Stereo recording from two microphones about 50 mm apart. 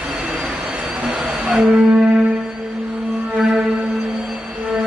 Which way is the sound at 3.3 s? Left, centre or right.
Right.